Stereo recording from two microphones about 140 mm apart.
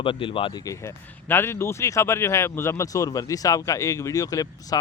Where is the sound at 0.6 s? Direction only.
20° left (ahead or behind).